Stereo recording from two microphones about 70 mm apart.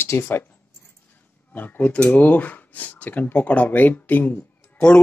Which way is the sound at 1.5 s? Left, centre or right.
Left.